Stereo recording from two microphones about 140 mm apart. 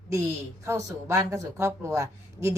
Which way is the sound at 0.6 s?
20° right (ahead or behind).